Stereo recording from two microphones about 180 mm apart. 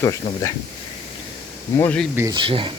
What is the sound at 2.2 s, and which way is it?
Speech, 25° right (ahead or behind).